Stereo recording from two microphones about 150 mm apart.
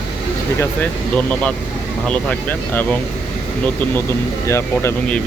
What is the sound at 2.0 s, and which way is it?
Speech, 5° left (ahead or behind).